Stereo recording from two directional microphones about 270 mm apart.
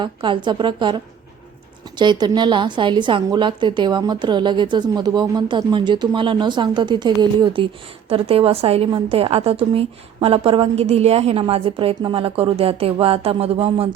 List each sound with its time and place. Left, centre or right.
0.0 s a woman's voice: centre